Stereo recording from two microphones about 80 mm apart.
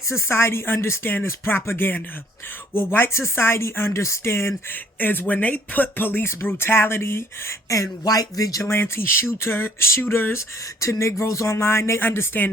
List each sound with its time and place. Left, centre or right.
0.1 s speech: left
8.6 s speech: left